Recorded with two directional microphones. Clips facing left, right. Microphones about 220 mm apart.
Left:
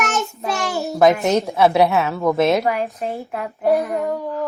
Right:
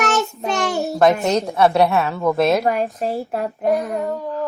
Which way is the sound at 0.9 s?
Centre (ahead or behind).